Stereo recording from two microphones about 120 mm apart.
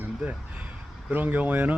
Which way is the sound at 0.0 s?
10° right (ahead or behind).